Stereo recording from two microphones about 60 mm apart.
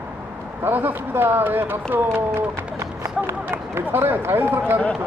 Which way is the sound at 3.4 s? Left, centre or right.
Right.